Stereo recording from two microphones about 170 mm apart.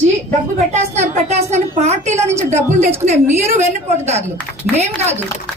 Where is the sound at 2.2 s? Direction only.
15° right (ahead or behind).